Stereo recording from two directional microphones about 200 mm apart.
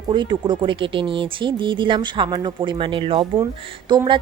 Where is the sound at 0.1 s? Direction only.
20° right (ahead or behind).